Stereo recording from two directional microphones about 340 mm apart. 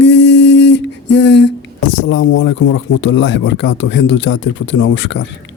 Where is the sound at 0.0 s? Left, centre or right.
Left.